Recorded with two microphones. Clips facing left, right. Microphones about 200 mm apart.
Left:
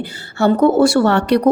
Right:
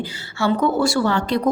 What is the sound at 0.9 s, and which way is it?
Speech, 70° left (ahead or behind).